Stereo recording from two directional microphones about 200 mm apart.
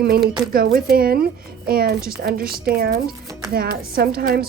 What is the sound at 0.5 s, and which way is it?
Speech, 50° right (ahead or behind).